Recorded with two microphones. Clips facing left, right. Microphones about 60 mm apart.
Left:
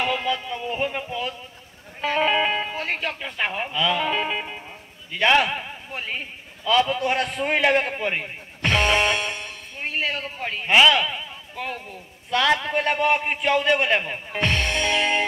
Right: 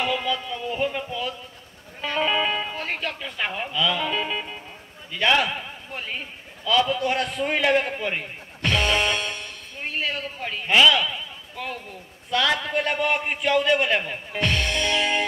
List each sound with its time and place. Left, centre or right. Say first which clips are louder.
0.0 s a man's voice: left 1 dB; left
2.1 s music: left 2 dB; left
2.7 s a man's voice: left 2 dB; centre